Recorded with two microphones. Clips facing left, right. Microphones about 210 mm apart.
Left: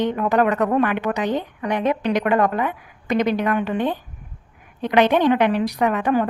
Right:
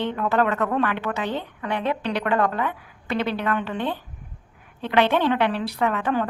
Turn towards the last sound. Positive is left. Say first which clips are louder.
# left 4 dB
turn(degrees=15)  # may be behind; listen again after turning